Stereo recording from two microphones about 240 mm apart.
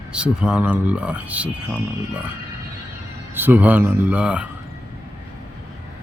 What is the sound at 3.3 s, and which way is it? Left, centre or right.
Speech, centre.